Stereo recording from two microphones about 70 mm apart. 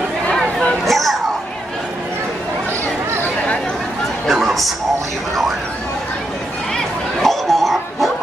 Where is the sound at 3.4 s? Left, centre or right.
Centre.